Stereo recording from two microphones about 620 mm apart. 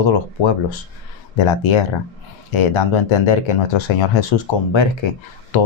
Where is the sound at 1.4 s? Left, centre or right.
Left.